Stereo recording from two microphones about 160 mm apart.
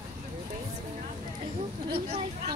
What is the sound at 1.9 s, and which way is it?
Speech, 40° right (ahead or behind).